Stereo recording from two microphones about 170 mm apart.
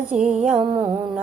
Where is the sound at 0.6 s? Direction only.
25° right (ahead or behind).